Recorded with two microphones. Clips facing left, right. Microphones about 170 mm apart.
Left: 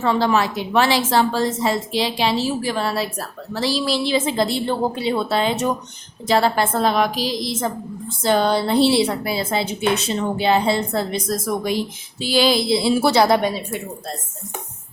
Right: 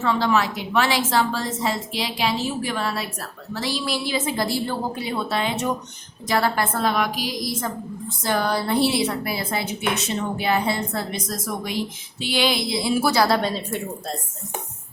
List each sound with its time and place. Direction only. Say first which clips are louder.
0.0 s a woman's voice: left 3 dB; 35° left (ahead or behind)
12.2 s a woman's voice: left 5 dB; 35° left (ahead or behind); by 14.2 s 5° left (ahead or behind)